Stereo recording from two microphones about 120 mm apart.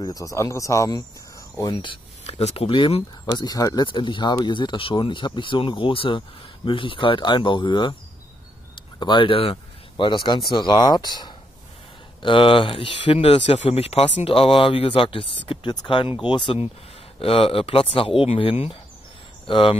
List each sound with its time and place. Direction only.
0.0 s speech: 30° left (ahead or behind)
2.2 s speech: 60° left (ahead or behind)